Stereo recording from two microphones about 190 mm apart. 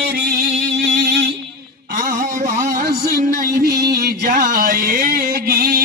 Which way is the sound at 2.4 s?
15° right (ahead or behind).